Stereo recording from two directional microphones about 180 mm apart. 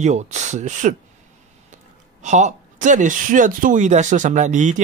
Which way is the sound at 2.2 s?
40° right (ahead or behind).